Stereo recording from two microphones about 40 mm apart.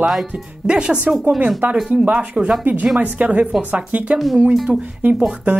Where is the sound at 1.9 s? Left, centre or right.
Right.